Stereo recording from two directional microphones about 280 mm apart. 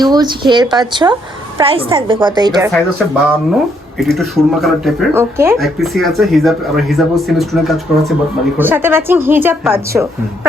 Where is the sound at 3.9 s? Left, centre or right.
Centre.